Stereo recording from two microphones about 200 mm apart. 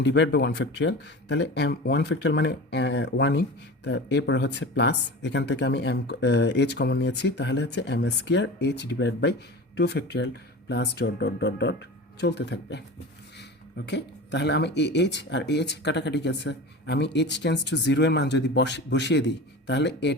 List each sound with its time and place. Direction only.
0.0 s speech: 60° left (ahead or behind)
13.8 s speech: 60° left (ahead or behind)